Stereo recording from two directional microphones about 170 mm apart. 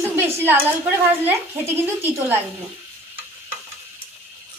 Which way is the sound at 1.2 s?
15° right (ahead or behind).